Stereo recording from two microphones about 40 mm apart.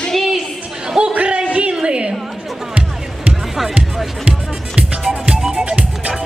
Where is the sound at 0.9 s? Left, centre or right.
Right.